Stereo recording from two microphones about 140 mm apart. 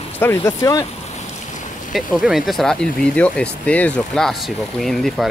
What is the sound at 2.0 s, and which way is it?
Speech, centre (ahead or behind).